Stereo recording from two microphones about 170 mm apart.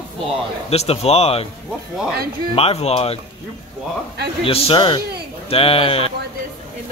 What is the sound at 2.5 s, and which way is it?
Speech, 35° left (ahead or behind).